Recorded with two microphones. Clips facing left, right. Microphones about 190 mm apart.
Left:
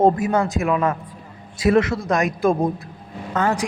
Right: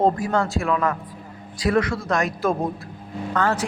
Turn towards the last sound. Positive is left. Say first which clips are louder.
# left 1 dB
turn(degrees=20)  # may be behind; listen again after turning